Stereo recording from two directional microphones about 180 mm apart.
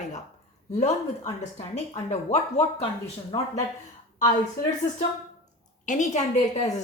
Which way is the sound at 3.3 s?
20° left (ahead or behind).